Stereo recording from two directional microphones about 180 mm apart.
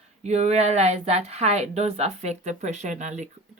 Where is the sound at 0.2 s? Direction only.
40° right (ahead or behind).